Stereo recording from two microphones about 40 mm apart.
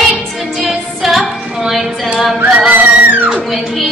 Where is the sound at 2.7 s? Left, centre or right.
Right.